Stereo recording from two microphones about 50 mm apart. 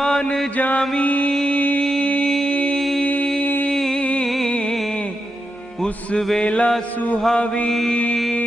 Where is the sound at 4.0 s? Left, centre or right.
Left.